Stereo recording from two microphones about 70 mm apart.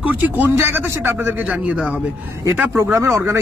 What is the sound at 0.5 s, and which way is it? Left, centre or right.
Speech, right.